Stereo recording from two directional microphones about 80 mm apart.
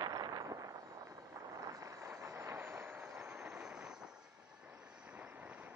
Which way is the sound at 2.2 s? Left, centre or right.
Right.